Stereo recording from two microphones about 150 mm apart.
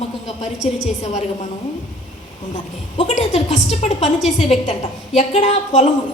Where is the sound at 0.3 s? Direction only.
50° left (ahead or behind).